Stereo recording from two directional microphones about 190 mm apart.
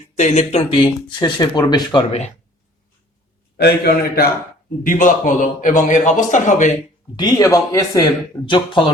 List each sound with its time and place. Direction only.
0.2 s speech: 35° left (ahead or behind)
3.6 s a man's voice: 55° left (ahead or behind)
4.8 s a man's voice: 45° left (ahead or behind)
7.2 s speech: 20° left (ahead or behind)